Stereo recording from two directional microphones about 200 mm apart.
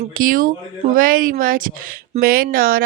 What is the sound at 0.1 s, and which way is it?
Speech, 45° right (ahead or behind).